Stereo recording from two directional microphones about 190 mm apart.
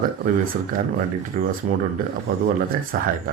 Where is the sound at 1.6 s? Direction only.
40° right (ahead or behind).